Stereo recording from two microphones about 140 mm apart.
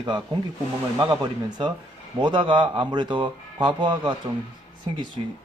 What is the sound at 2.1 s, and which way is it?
Speech, 35° right (ahead or behind).